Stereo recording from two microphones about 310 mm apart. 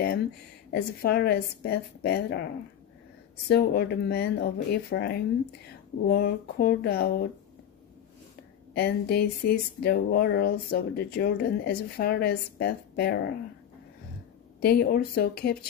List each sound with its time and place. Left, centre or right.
0.7 s speech: left
3.4 s speech: left
8.7 s speech: left
14.6 s speech: left